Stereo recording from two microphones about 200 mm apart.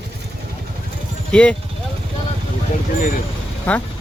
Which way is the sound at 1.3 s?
5° left (ahead or behind).